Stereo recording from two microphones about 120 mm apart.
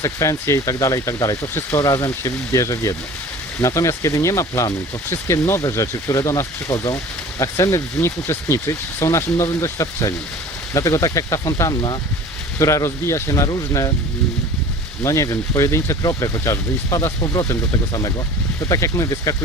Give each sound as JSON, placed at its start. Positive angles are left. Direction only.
{"t": 0.0, "sound": "speech", "side_deg": 25}
{"t": 15.0, "sound": "speech", "side_deg": 25}